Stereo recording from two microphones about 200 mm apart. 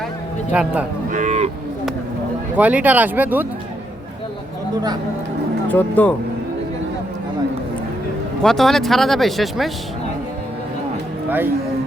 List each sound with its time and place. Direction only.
0.5 s speech: 5° right (ahead or behind)
1.1 s cattle: 35° right (ahead or behind)
2.6 s speech: 5° right (ahead or behind)
5.6 s speech: 5° left (ahead or behind)
8.4 s speech: centre (ahead or behind)